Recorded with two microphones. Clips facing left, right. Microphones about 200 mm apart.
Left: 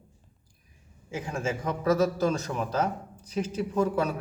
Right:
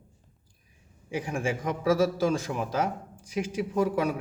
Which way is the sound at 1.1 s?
15° right (ahead or behind).